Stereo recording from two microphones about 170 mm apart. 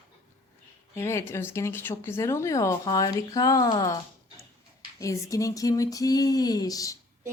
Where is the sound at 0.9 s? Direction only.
15° left (ahead or behind).